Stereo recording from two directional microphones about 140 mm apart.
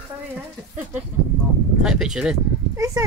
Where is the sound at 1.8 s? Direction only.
5° right (ahead or behind).